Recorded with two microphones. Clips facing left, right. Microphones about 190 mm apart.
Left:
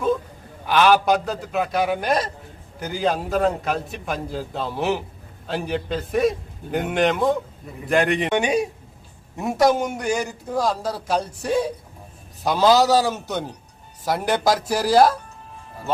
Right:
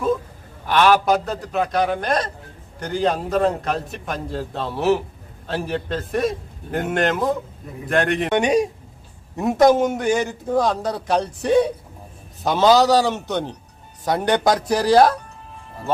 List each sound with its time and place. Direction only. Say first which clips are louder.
0.7 s a man's voice: right 1 dB; centre (ahead or behind)
12.7 s a man's voice: right 2 dB; 15° right (ahead or behind)
14.0 s a man's voice: right 2 dB; centre (ahead or behind)